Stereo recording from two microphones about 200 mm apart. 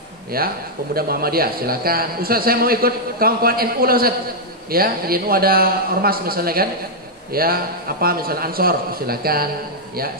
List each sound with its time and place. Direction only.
0.3 s a man's voice: 50° right (ahead or behind)